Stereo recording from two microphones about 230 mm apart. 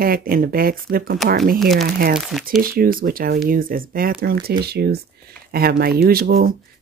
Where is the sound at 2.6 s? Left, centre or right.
Right.